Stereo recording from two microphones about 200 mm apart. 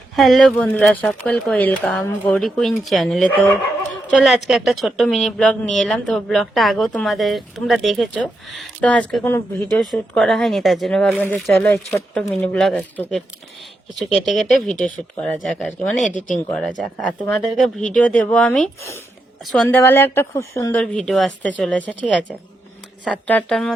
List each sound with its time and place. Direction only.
0.2 s speech: centre (ahead or behind)
14.3 s speech: centre (ahead or behind)
16.0 s speech: 40° left (ahead or behind)
16.5 s speech: 5° left (ahead or behind)
20.8 s speech: centre (ahead or behind)
23.0 s speech: 5° left (ahead or behind)